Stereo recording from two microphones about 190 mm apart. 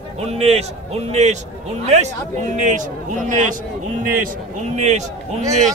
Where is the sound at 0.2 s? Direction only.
35° right (ahead or behind).